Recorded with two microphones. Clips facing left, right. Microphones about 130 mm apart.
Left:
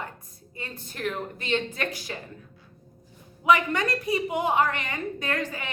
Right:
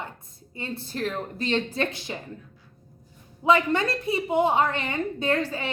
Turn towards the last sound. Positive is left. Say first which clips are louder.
# right 5 dB
turn(degrees=-30)  # may be behind; listen again after turning